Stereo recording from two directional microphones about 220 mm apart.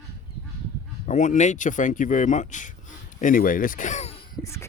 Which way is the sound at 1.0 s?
35° left (ahead or behind).